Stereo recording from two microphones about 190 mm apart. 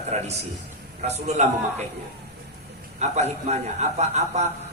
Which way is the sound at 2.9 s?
35° right (ahead or behind).